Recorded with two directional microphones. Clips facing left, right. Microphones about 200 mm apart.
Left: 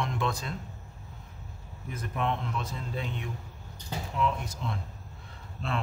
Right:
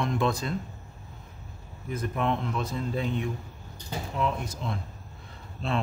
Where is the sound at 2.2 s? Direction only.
40° right (ahead or behind).